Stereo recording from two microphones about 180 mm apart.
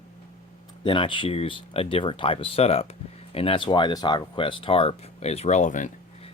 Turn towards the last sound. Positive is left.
turn(degrees=45)  # may be behind; listen again after turning